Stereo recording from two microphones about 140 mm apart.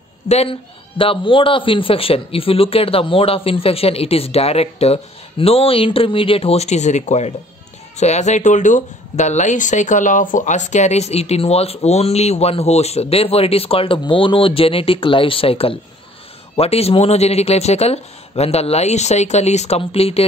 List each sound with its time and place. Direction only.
0.3 s speech: 45° left (ahead or behind)